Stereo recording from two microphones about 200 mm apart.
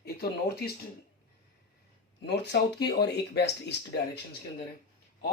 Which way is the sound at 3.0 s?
55° left (ahead or behind).